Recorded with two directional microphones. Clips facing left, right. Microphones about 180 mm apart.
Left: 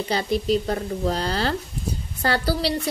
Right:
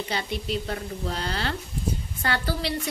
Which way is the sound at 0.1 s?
40° left (ahead or behind).